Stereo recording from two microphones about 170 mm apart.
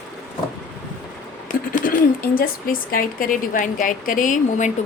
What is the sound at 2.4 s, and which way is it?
A woman's voice, 55° left (ahead or behind).